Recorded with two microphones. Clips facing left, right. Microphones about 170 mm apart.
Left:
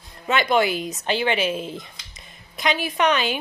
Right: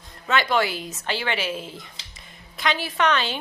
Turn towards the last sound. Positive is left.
turn(degrees=15)  # may be behind; listen again after turning